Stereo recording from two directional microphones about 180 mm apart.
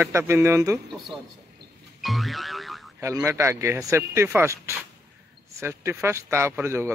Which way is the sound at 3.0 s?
15° right (ahead or behind).